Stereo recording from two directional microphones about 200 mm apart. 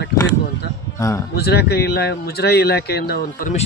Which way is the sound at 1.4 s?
55° left (ahead or behind).